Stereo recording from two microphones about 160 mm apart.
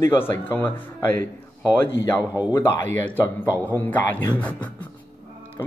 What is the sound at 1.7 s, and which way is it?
Speech, 15° left (ahead or behind).